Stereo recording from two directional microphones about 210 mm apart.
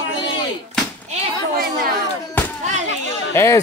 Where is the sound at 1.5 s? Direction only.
45° right (ahead or behind).